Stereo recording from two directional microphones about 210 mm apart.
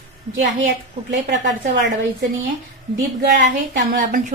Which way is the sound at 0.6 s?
55° right (ahead or behind).